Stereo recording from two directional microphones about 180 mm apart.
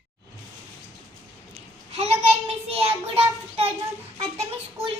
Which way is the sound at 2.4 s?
35° right (ahead or behind).